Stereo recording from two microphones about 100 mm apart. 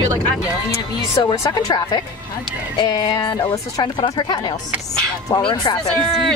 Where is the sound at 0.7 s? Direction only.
30° left (ahead or behind).